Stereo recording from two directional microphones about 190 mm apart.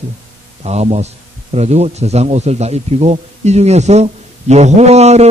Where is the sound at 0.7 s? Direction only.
35° right (ahead or behind).